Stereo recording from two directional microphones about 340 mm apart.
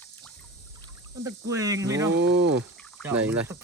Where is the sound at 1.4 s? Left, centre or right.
Centre.